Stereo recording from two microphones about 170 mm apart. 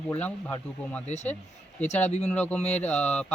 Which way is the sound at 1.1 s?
40° left (ahead or behind).